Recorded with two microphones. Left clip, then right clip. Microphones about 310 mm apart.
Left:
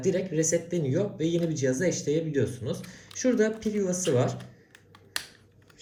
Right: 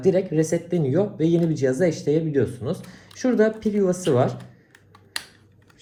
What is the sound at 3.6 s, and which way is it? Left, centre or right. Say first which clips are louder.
Speech: right 7 dB; right.